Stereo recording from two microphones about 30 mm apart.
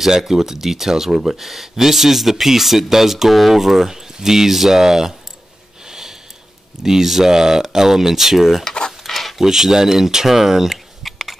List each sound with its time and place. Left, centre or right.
0.0 s speech: centre
5.9 s sniff: centre
6.8 s speech: centre
9.0 s a sound: centre
9.4 s speech: centre
10.7 s a sound: centre